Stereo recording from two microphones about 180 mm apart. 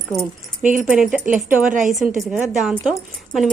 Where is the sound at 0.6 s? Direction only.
45° right (ahead or behind).